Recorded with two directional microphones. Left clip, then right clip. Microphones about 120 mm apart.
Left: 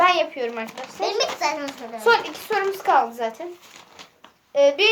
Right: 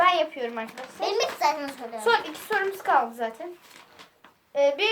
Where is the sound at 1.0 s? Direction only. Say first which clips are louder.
Left 2 dB; 25° right (ahead or behind).